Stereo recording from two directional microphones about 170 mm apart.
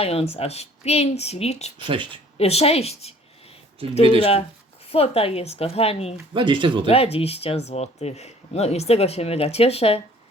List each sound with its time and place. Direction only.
0.0 s speech: 35° left (ahead or behind)
4.2 s speech: 35° left (ahead or behind)
6.3 s speech: 30° right (ahead or behind)
6.8 s speech: 35° left (ahead or behind)